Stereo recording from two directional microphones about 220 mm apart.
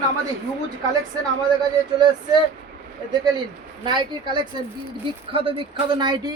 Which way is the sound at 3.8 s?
20° right (ahead or behind).